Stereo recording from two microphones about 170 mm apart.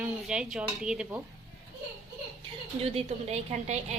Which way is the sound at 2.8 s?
40° right (ahead or behind).